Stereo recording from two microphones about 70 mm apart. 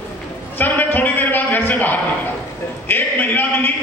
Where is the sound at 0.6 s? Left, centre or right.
Left.